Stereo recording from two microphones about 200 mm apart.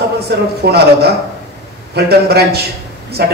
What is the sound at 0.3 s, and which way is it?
Speech, 55° right (ahead or behind).